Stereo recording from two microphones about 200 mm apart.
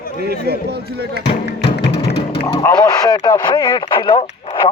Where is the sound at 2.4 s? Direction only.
15° left (ahead or behind).